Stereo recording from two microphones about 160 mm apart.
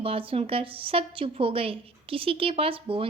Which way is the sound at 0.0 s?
35° right (ahead or behind).